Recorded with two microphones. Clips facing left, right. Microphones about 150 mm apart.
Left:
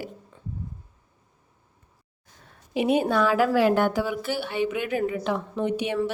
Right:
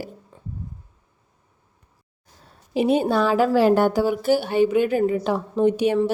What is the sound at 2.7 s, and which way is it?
Speech, 30° right (ahead or behind).